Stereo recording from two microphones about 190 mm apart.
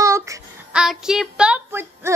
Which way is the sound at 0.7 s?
5° right (ahead or behind).